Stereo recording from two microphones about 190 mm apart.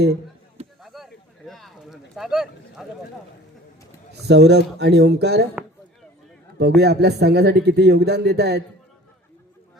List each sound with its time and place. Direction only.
0.8 s a sound: centre (ahead or behind)
4.3 s speech: 60° right (ahead or behind)
6.6 s speech: 60° right (ahead or behind)